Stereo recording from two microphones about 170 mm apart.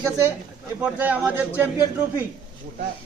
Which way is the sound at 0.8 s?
10° right (ahead or behind).